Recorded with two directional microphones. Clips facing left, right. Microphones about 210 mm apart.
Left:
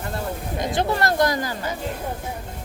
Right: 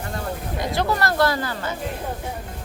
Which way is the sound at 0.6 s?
20° left (ahead or behind).